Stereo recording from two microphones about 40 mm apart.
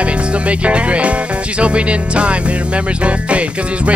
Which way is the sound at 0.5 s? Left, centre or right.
Right.